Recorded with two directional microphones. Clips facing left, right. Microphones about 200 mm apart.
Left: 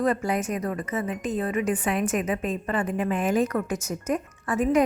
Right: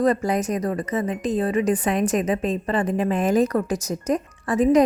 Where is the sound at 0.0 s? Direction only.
40° right (ahead or behind).